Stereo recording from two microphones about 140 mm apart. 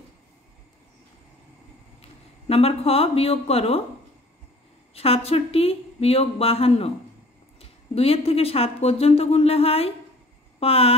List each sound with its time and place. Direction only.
2.0 s speech: 45° left (ahead or behind)
4.9 s speech: 45° left (ahead or behind)